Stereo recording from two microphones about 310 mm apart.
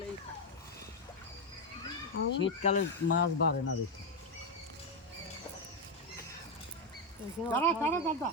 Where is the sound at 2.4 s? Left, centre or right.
Left.